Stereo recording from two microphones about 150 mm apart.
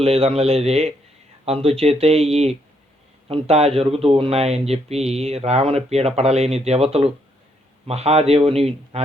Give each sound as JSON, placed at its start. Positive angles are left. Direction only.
{"t": 0.0, "sound": "speech", "side_deg": -40}